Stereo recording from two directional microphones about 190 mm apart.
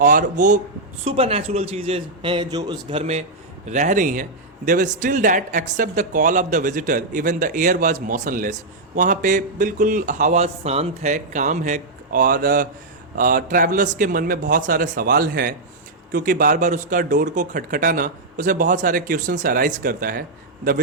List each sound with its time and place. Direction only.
0.0 s a man's voice: 45° right (ahead or behind)
1.0 s a man's voice: 30° right (ahead or behind)
3.0 s a man's voice: 35° right (ahead or behind)